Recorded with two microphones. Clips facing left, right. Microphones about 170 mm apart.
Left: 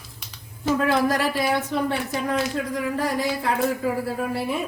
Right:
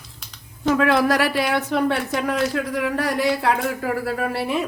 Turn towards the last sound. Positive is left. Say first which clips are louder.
# right 2 dB
turn(degrees=-75)  # may be behind; listen again after turning